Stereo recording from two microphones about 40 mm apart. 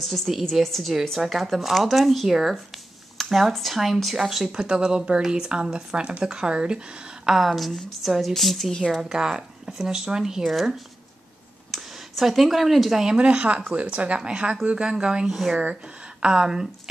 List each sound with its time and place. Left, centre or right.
0.3 s speech: centre
4.5 s speech: right
7.2 s speech: centre
9.1 s speech: centre
10.4 s speech: centre
11.7 s speech: centre
13.2 s speech: right